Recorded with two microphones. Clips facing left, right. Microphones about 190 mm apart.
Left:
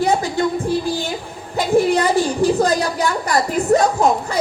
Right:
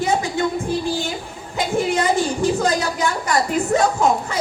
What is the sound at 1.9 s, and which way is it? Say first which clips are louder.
A woman's voice: left 2 dB; 35° left (ahead or behind).